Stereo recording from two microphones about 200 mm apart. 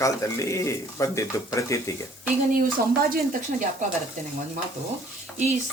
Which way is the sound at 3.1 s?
40° right (ahead or behind).